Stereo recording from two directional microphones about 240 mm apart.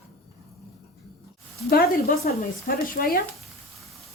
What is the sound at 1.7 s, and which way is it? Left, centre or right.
Speech, left.